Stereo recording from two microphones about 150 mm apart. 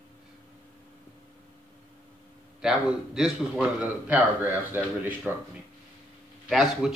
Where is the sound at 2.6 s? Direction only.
5° right (ahead or behind).